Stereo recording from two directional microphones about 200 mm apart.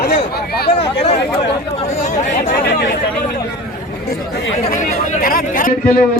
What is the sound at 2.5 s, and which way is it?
Speech, 60° left (ahead or behind).